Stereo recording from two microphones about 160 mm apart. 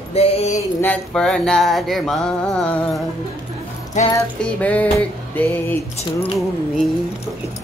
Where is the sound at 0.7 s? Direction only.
10° left (ahead or behind).